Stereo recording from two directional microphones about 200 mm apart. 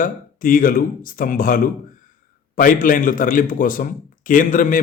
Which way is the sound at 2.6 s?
45° left (ahead or behind).